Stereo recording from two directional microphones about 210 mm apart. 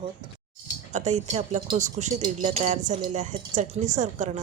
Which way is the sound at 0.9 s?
35° right (ahead or behind).